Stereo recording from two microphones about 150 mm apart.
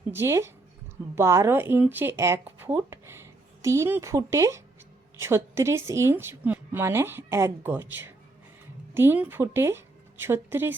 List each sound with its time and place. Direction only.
0.1 s a woman's voice: 15° right (ahead or behind)